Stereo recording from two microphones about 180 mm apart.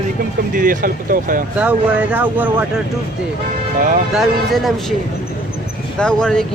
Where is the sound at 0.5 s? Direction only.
50° right (ahead or behind).